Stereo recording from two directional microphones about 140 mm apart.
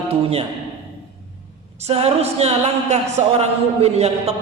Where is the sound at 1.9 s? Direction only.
45° right (ahead or behind).